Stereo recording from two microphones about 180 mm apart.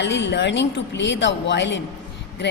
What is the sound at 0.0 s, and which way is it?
A woman's voice, 80° left.